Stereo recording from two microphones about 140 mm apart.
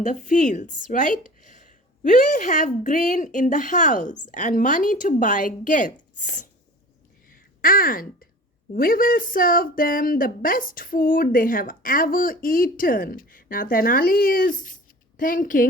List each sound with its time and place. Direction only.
0.0 s a woman's voice: 60° left (ahead or behind)
7.3 s a sound: 90° left
8.7 s a woman's voice: 90° left; by 15.6 s 75° left (ahead or behind)